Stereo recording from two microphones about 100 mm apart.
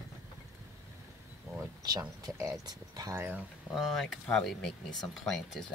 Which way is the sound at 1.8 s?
40° right (ahead or behind).